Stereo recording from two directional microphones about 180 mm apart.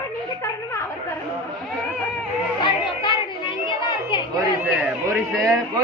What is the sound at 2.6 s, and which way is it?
Music, 25° left (ahead or behind).